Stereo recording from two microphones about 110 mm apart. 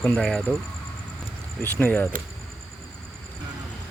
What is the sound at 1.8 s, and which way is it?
Speech, 20° left (ahead or behind).